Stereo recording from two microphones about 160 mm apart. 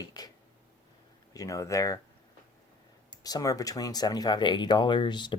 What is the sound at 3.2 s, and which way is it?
Speech, 20° left (ahead or behind).